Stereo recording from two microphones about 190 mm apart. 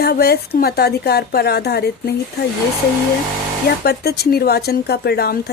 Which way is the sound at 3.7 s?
55° left (ahead or behind).